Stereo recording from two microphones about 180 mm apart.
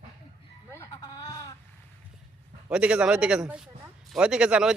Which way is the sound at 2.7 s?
5° right (ahead or behind).